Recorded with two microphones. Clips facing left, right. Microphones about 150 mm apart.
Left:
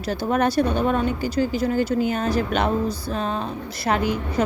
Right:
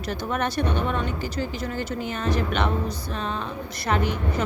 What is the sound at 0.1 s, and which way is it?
Speech, 35° left (ahead or behind).